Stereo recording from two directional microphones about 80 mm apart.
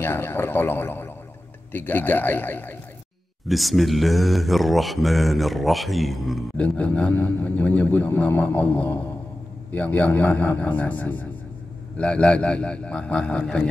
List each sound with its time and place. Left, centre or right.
0.0 s a man's voice: left
3.4 s speech: centre
6.5 s a man's voice: centre